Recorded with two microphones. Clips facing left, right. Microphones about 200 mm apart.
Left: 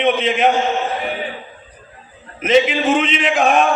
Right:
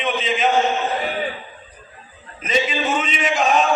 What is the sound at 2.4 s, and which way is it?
Speech, 70° left (ahead or behind).